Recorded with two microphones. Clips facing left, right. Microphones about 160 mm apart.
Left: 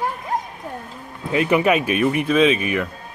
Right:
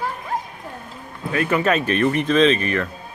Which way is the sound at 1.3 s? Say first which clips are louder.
Left 2 dB; 15° left (ahead or behind).